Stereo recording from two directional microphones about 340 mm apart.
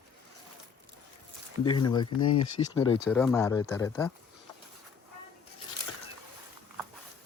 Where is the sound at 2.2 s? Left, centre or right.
Left.